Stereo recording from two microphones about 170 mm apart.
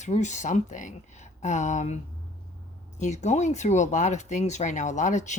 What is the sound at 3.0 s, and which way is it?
A woman's voice, 45° left (ahead or behind).